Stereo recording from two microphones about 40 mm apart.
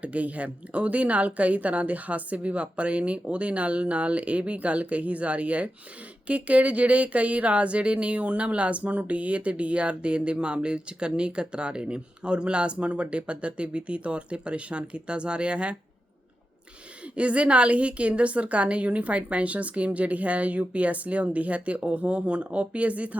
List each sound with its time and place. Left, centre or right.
0.0 s a woman's voice: right
17.2 s a woman's voice: right